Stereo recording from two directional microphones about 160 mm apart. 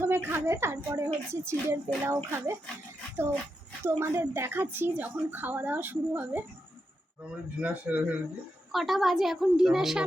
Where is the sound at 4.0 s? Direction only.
15° right (ahead or behind).